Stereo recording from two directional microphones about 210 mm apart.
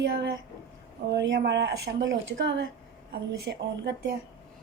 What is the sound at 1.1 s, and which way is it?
Speech, 55° right (ahead or behind).